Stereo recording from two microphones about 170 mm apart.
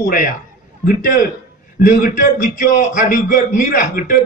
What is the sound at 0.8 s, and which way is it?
Speech, 55° left (ahead or behind).